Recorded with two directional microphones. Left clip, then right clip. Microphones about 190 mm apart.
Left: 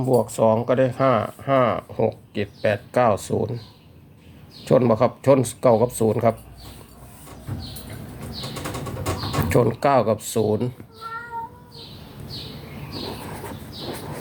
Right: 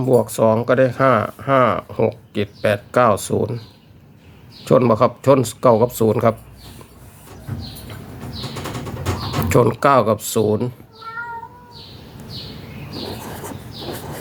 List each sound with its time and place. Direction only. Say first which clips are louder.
0.0 s speech: right 3 dB; 20° right (ahead or behind)
4.6 s speech: right 3 dB; 15° right (ahead or behind)
9.5 s speech: right 5 dB; 20° right (ahead or behind)
13.3 s vehicle: right 3 dB; 5° right (ahead or behind)